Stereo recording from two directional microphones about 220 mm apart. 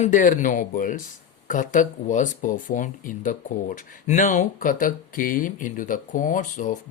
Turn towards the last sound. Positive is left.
turn(degrees=35)  # may be behind; listen again after turning